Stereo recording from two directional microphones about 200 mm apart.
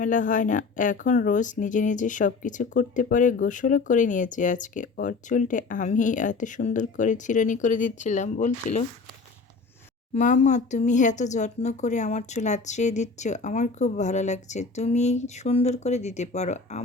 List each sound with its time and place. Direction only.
0.0 s speech: 40° left (ahead or behind)
10.2 s speech: 35° left (ahead or behind)